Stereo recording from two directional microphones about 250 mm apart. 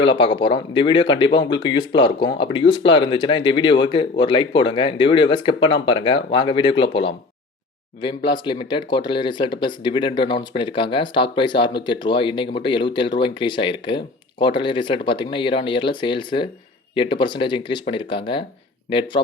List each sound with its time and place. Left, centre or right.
0.0 s speech: centre